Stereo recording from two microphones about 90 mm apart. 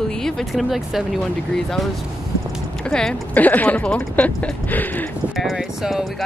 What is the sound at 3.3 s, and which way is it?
Speech, 20° left (ahead or behind).